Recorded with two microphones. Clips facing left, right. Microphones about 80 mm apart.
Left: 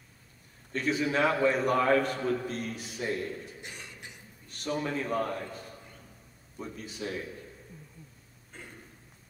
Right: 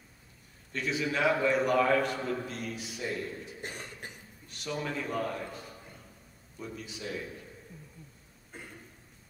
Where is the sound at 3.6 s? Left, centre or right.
Right.